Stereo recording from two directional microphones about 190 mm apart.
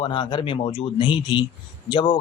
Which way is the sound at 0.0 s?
25° left (ahead or behind).